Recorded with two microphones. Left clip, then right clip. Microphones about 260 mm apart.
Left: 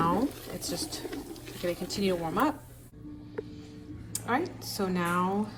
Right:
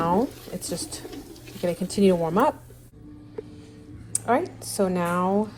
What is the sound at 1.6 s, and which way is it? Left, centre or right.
Speech, centre.